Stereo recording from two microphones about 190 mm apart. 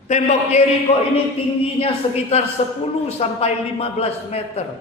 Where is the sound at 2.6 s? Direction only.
30° left (ahead or behind).